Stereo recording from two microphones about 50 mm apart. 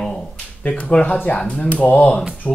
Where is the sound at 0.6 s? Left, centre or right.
Left.